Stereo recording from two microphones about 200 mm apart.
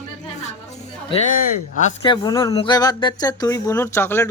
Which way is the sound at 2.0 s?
20° left (ahead or behind).